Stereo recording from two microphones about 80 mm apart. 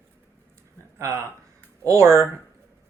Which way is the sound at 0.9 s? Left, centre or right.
Right.